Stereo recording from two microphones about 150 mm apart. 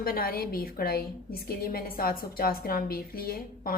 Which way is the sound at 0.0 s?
80° left.